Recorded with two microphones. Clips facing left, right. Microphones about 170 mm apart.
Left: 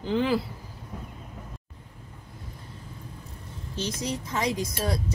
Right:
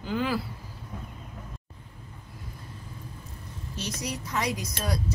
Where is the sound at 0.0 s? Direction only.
25° left (ahead or behind).